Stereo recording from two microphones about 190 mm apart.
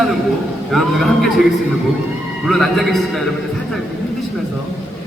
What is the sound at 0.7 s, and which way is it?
Speech, centre (ahead or behind).